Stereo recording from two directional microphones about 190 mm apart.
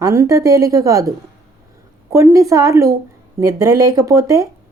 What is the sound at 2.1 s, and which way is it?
A woman's voice, 15° right (ahead or behind).